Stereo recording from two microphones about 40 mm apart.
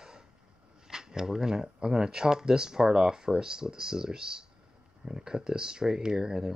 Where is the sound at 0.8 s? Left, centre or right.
Centre.